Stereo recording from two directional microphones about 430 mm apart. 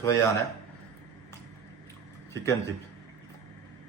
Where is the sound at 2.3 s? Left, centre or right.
Centre.